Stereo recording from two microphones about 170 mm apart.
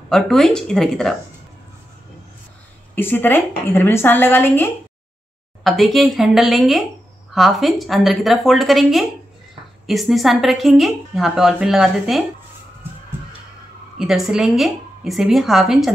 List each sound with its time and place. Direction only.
0.1 s a woman's voice: 5° left (ahead or behind)
3.0 s a woman's voice: 10° left (ahead or behind)
5.6 s a woman's voice: centre (ahead or behind)
13.9 s a woman's voice: centre (ahead or behind)